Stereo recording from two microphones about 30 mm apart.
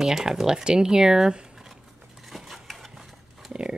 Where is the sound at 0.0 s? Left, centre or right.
Centre.